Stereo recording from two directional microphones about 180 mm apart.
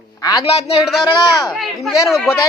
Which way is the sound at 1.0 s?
20° left (ahead or behind).